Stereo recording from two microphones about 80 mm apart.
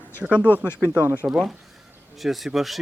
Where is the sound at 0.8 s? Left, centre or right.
Right.